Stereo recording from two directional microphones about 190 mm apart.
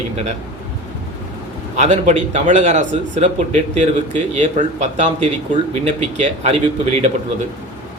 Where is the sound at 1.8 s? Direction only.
40° right (ahead or behind).